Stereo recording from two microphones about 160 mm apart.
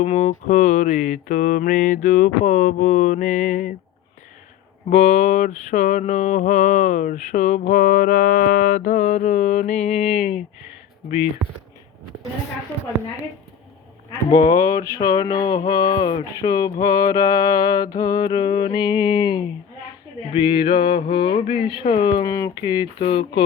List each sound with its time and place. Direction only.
0.0 s mantra: 40° left (ahead or behind)
4.9 s mantra: 45° left (ahead or behind)
10.2 s speech: 5° right (ahead or behind)
14.3 s mantra: 25° left (ahead or behind)
20.3 s a sound: 30° left (ahead or behind)
22.2 s mantra: 20° left (ahead or behind)